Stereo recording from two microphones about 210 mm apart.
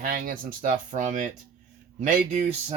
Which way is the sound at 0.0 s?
40° right (ahead or behind).